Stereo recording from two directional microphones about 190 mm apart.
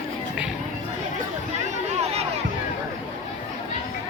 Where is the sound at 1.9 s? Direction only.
35° right (ahead or behind).